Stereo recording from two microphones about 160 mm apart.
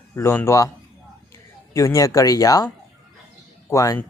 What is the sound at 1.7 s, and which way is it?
Speech, 20° left (ahead or behind).